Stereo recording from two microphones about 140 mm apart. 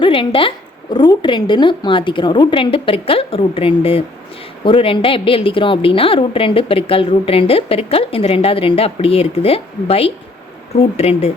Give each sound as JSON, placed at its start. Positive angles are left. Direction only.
{"t": 0.0, "sound": "a woman's voice", "side_deg": 40}